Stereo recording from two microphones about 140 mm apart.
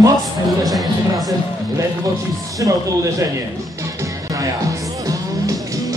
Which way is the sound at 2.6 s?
25° right (ahead or behind).